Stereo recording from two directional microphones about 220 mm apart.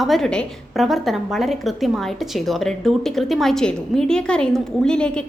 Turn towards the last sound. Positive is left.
turn(degrees=5)  # may be behind; listen again after turning